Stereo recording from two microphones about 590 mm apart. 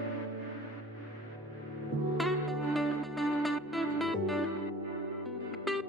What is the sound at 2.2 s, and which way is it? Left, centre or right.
Music, centre.